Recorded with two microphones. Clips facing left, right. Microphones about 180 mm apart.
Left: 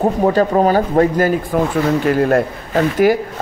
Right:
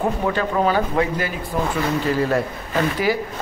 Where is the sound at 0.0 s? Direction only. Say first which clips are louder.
Left 7 dB; 40° left (ahead or behind).